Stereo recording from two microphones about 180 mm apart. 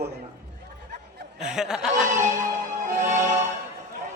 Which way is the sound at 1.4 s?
5° right (ahead or behind).